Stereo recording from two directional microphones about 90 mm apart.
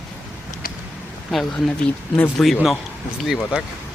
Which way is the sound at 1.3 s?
Centre (ahead or behind).